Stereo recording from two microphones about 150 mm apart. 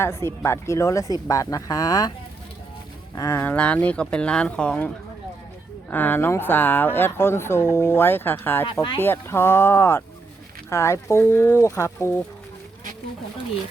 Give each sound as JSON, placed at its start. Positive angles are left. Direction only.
{"t": 0.0, "sound": "speech", "side_deg": 20}
{"t": 3.2, "sound": "speech", "side_deg": 20}
{"t": 5.9, "sound": "speech", "side_deg": 10}